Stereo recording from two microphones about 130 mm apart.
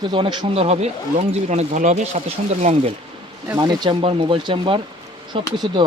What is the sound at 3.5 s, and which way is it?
Speech, 35° right (ahead or behind).